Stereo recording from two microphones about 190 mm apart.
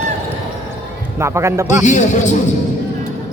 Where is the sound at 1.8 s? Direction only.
40° left (ahead or behind).